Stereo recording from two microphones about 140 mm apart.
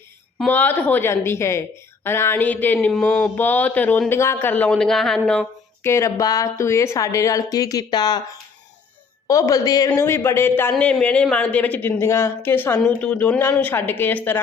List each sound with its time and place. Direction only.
0.4 s a man's voice: 10° left (ahead or behind)
5.8 s a man's voice: 20° left (ahead or behind)